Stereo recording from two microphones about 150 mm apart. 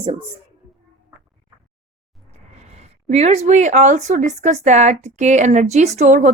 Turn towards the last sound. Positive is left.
turn(degrees=-50)  # may be behind; listen again after turning